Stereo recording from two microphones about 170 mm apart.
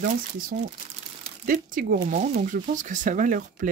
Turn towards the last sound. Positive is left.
turn(degrees=-50)  # may be behind; listen again after turning